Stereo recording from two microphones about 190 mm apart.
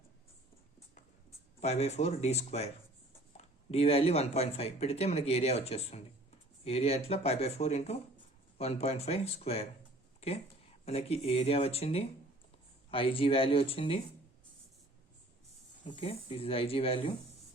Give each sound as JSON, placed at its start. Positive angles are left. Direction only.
{"t": 1.6, "sound": "speech", "side_deg": 35}
{"t": 15.8, "sound": "speech", "side_deg": 25}